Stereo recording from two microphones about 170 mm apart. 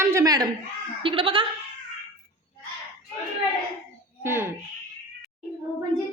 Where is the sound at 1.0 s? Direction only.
30° right (ahead or behind).